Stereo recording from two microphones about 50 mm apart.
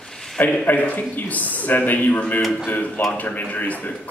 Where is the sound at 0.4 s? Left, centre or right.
Left.